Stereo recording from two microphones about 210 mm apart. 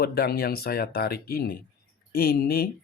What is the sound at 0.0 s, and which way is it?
Speech, 50° left (ahead or behind).